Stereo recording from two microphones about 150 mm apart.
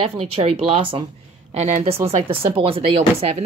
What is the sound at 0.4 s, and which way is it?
Speech, 45° right (ahead or behind).